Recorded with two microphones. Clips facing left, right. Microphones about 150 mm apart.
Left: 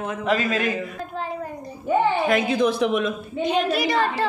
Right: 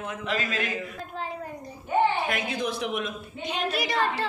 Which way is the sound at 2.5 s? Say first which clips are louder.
Left 9 dB; 90° left.